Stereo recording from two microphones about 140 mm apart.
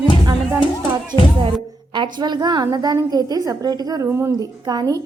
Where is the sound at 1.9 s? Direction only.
30° right (ahead or behind).